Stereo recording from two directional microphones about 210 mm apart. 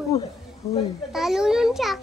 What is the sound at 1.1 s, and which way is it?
Speech, centre (ahead or behind).